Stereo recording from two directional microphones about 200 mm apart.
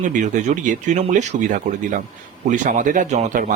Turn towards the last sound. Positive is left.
turn(degrees=-40)  # may be behind; listen again after turning